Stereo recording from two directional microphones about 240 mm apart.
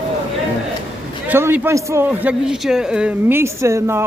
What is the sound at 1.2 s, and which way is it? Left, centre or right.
A man's voice, centre.